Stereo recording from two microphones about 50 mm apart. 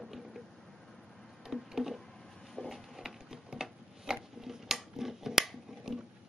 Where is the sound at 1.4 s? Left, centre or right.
Centre.